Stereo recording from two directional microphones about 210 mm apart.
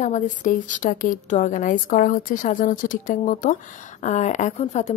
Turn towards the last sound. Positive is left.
turn(degrees=35)  # may be behind; listen again after turning